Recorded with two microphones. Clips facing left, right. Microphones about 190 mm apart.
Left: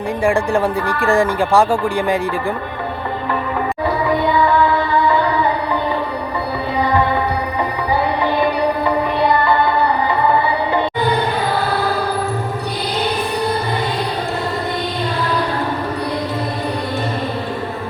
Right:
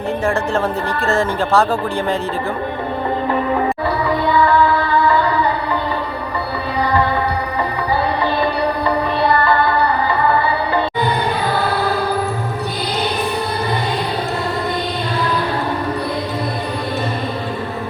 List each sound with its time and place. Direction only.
0.3 s speech: 15° left (ahead or behind)
4.1 s music: 20° left (ahead or behind)
8.2 s music: 15° left (ahead or behind)